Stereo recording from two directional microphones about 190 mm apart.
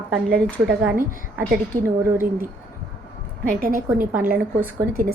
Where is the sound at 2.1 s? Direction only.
15° right (ahead or behind).